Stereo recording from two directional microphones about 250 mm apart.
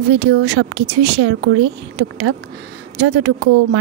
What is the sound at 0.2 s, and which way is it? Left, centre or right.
Speech, right.